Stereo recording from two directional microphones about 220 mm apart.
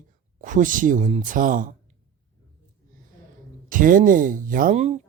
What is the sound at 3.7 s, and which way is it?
Speech, 35° right (ahead or behind).